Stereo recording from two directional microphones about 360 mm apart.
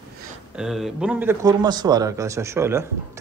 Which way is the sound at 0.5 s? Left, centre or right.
Centre.